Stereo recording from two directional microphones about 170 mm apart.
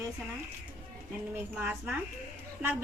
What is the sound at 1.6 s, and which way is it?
Speech, 5° right (ahead or behind).